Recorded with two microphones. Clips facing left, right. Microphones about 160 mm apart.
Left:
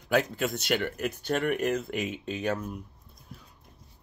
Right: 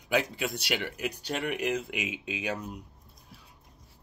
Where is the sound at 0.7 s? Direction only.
50° left (ahead or behind).